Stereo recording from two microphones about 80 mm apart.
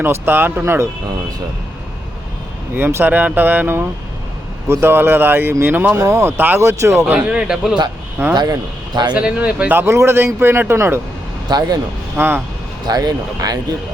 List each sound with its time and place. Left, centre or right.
0.0 s speech: right
2.7 s speech: right
7.1 s speech: centre
8.3 s speech: right
9.1 s speech: centre
9.8 s a man's voice: right
11.4 s speech: right
12.1 s speech: right
12.9 s speech: right